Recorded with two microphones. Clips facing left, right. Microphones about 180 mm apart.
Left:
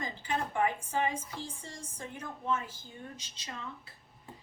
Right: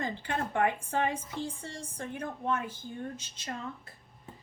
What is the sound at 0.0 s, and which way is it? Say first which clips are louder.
A woman's voice: right 2 dB; 60° right (ahead or behind).